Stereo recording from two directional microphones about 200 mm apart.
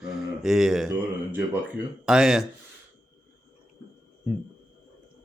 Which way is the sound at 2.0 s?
Centre (ahead or behind).